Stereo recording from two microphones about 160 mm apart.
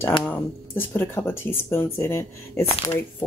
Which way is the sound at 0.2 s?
10° left (ahead or behind).